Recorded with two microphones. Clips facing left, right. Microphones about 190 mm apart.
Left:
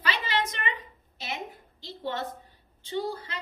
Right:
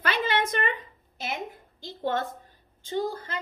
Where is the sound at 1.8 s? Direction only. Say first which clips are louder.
Right 4 dB; 50° right (ahead or behind).